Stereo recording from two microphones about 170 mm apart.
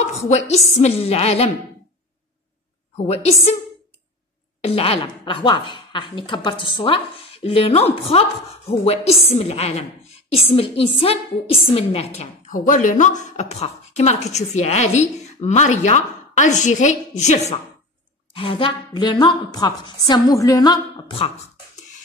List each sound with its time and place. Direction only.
0.0 s a woman's voice: 40° left (ahead or behind)
3.1 s a woman's voice: 40° left (ahead or behind)
4.6 s a woman's voice: 35° left (ahead or behind)
18.3 s speech: 30° left (ahead or behind)